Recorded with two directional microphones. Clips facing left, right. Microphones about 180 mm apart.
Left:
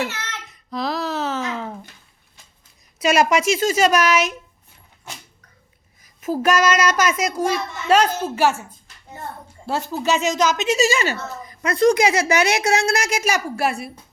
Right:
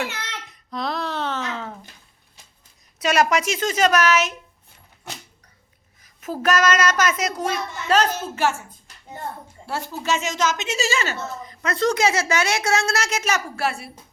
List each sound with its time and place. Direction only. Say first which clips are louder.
0.1 s child singing: left 1 dB; 15° right (ahead or behind)
0.7 s a sound: left 3 dB; 5° left (ahead or behind)
3.0 s a child's voice: left 2 dB; 10° left (ahead or behind)
6.2 s a child's voice: left 2 dB; 10° left (ahead or behind)
9.6 s a child's voice: left 4 dB; 15° left (ahead or behind)